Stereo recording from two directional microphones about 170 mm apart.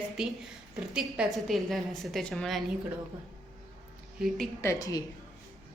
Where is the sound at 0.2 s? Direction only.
5° right (ahead or behind).